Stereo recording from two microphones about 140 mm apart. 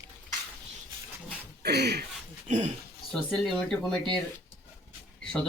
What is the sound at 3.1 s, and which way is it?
Speech, 5° left (ahead or behind).